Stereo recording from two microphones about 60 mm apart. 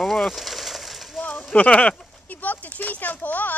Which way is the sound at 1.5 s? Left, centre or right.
Left.